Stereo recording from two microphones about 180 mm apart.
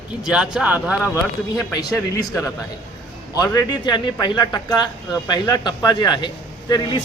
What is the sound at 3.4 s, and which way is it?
Speech, 20° left (ahead or behind).